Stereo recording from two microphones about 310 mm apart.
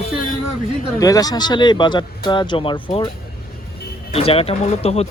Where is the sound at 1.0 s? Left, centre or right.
Centre.